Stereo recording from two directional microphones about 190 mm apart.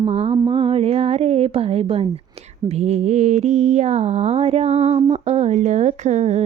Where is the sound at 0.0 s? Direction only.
30° right (ahead or behind).